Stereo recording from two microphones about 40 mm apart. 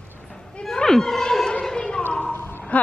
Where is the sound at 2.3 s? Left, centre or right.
Left.